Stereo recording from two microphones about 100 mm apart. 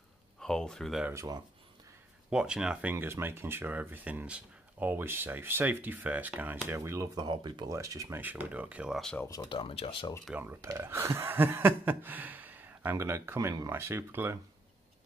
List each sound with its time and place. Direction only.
0.4 s speech: 5° left (ahead or behind)
1.1 s speech: 40° right (ahead or behind)
2.2 s speech: 10° right (ahead or behind); by 7.1 s 30° right (ahead or behind)
7.2 s speech: 45° right (ahead or behind)
7.7 s speech: 35° right (ahead or behind)
8.2 s speech: 15° right (ahead or behind)
8.9 s speech: 5° left (ahead or behind)
9.5 s speech: 65° left (ahead or behind)
10.4 s speech: 25° right (ahead or behind)